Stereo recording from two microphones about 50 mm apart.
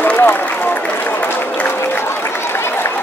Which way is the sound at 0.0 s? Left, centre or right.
Left.